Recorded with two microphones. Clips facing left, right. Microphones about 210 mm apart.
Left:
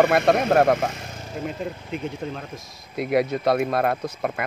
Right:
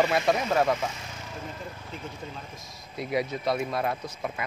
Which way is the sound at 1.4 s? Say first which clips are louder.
Left 9 dB; 70° left (ahead or behind).